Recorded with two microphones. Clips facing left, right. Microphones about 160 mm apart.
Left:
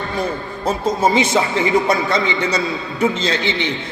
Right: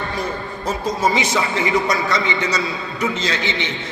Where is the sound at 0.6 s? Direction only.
30° left (ahead or behind).